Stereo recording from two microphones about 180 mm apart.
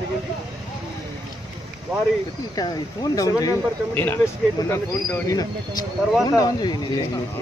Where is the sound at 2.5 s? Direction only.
20° left (ahead or behind).